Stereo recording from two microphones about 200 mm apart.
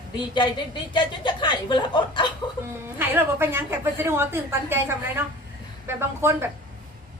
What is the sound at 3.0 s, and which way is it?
A woman's voice, 10° right (ahead or behind).